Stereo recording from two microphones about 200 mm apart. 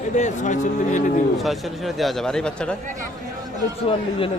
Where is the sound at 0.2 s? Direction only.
40° left (ahead or behind).